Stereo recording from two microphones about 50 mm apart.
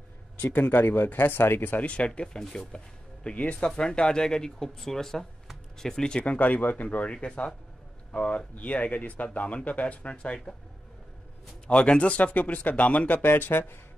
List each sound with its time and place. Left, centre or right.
0.4 s speech: left
1.9 s speech: left
2.2 s speech: centre
3.3 s speech: left
6.2 s speech: left
11.6 s speech: left
13.2 s speech: left